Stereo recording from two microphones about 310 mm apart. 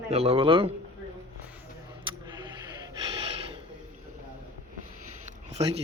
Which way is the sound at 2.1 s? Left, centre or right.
Centre.